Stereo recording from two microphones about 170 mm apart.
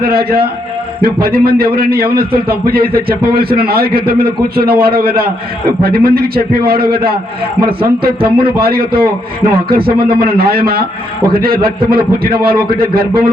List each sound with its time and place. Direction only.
0.0 s a man's voice: 65° right (ahead or behind)